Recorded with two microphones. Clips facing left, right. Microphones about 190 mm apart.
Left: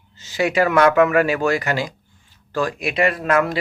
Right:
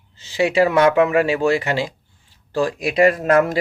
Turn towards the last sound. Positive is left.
turn(degrees=-40)  # may be behind; listen again after turning